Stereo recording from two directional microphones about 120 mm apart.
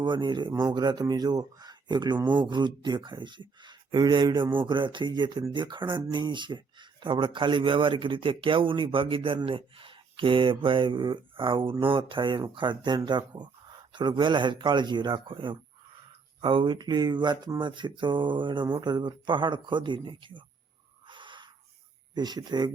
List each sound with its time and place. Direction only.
0.0 s speech: 40° right (ahead or behind)
21.1 s a sound: 40° right (ahead or behind)
22.1 s speech: 35° right (ahead or behind)